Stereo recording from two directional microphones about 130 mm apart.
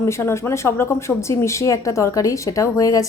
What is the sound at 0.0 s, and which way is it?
A woman's voice, 20° left (ahead or behind).